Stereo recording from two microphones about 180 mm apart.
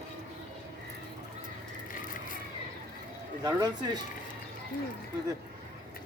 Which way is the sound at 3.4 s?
20° right (ahead or behind).